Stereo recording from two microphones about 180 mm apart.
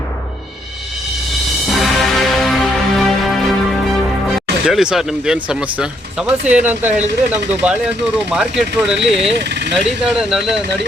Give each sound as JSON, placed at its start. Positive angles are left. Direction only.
{"t": 1.7, "sound": "music", "side_deg": 0}
{"t": 4.3, "sound": "speech", "side_deg": 0}
{"t": 9.0, "sound": "speech", "side_deg": -35}
{"t": 9.4, "sound": "speech", "side_deg": -70}
{"t": 10.0, "sound": "speech", "side_deg": -5}